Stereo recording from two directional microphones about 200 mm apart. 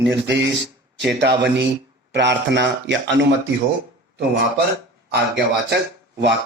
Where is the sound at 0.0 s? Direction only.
60° right (ahead or behind).